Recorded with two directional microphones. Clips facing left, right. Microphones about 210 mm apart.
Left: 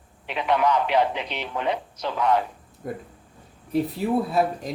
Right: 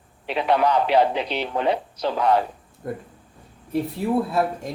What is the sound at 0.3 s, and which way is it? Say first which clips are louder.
A man's voice: right 2 dB; 35° right (ahead or behind).